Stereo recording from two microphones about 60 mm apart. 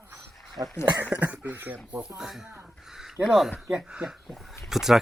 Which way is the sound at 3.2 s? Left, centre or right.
Centre.